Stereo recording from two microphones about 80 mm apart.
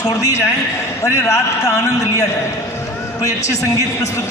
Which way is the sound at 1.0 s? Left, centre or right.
Left.